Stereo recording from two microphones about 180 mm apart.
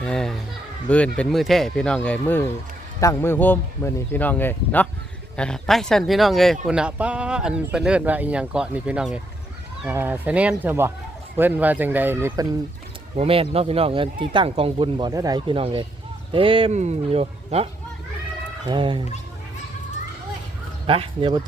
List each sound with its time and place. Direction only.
0.0 s a sound: 5° left (ahead or behind)
0.9 s a man's voice: 5° left (ahead or behind); by 12.5 s 15° right (ahead or behind)
13.1 s speech: 30° right (ahead or behind)
18.7 s speech: 25° right (ahead or behind)
20.8 s speech: 30° right (ahead or behind)